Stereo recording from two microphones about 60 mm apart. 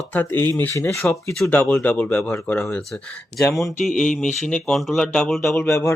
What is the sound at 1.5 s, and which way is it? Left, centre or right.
Speech, left.